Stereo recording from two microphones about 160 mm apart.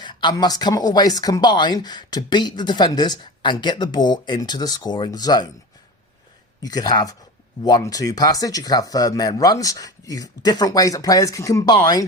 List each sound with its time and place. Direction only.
0.0 s speech: 30° left (ahead or behind)
6.6 s speech: 25° left (ahead or behind)